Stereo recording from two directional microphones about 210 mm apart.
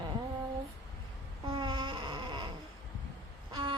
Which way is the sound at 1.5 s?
20° right (ahead or behind).